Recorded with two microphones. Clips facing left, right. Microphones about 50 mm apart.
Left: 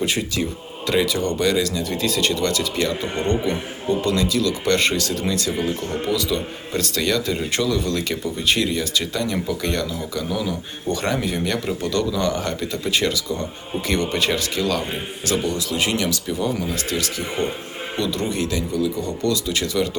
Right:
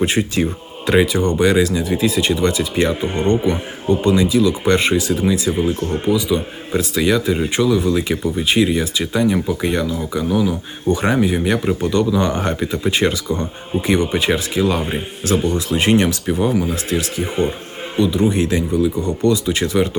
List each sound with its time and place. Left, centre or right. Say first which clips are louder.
0.0 s a man's voice: right 5 dB; right
13.8 s a man's voice: right 4 dB; centre
17.9 s a man's voice: right 8 dB; centre